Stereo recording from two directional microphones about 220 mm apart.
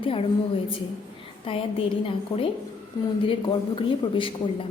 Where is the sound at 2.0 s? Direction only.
25° left (ahead or behind).